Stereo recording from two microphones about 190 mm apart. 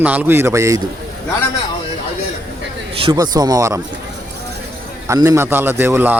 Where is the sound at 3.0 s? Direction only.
20° right (ahead or behind).